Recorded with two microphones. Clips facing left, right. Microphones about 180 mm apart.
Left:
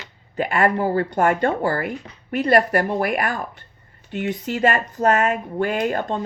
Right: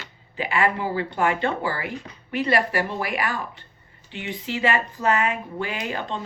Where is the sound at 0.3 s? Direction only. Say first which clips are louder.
Left 4 dB; 45° left (ahead or behind).